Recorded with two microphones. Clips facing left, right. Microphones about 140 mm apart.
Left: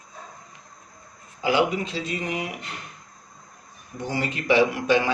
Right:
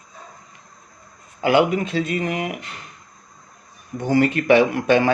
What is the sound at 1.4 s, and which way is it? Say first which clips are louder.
Speech: right 5 dB; 55° right (ahead or behind).